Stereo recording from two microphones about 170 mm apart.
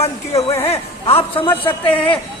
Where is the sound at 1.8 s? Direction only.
10° left (ahead or behind).